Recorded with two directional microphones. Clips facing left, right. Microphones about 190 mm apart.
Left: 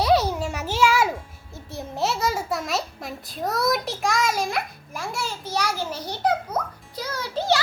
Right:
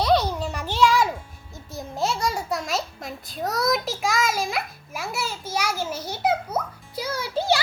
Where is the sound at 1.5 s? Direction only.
Centre (ahead or behind).